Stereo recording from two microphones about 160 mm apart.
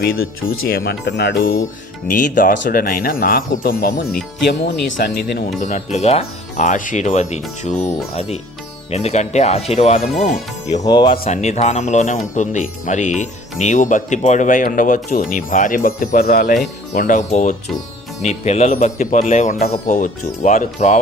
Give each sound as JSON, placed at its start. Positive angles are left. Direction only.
{"t": 0.0, "sound": "speech", "side_deg": 70}
{"t": 2.0, "sound": "speech", "side_deg": 55}
{"t": 6.0, "sound": "speech", "side_deg": 40}
{"t": 10.8, "sound": "speech", "side_deg": 30}
{"t": 11.3, "sound": "speech", "side_deg": 45}
{"t": 16.9, "sound": "speech", "side_deg": 60}